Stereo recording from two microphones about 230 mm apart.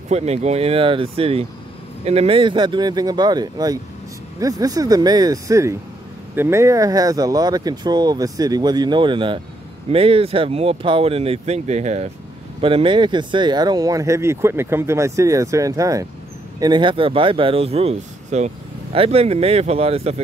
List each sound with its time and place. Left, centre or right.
0.1 s speech: right